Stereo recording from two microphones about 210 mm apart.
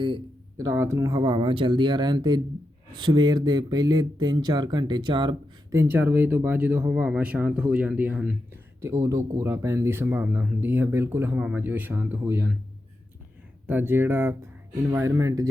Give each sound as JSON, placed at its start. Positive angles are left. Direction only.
{"t": 0.0, "sound": "speech", "side_deg": -20}
{"t": 5.8, "sound": "speech", "side_deg": -10}
{"t": 13.7, "sound": "speech", "side_deg": -10}